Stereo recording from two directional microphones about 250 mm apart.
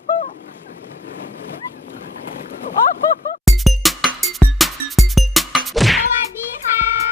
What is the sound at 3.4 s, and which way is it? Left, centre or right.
Music, centre.